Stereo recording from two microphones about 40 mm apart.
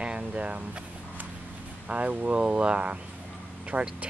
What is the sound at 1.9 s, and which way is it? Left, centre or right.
Speech, right.